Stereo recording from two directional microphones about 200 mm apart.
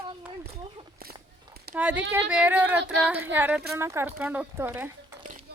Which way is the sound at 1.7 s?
5° right (ahead or behind).